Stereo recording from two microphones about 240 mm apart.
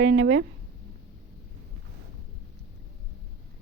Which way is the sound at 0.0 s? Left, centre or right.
Right.